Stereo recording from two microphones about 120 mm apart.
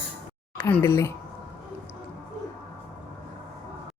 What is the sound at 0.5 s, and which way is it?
Speech, 20° left (ahead or behind).